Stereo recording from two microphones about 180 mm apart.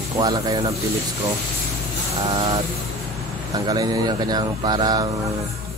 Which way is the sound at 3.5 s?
20° right (ahead or behind).